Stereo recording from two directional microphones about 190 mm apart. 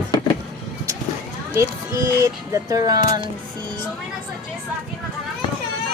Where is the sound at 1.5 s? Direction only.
15° right (ahead or behind).